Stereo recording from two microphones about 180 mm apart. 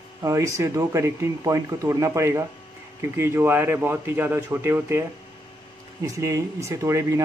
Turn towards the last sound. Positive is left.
turn(degrees=-15)  # may be behind; listen again after turning